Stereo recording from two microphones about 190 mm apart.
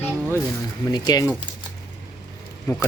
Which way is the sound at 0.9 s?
20° left (ahead or behind).